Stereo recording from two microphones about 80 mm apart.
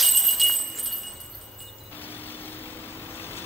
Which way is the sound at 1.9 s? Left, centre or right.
Left.